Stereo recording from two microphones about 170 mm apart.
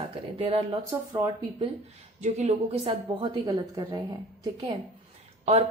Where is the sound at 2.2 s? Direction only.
40° right (ahead or behind).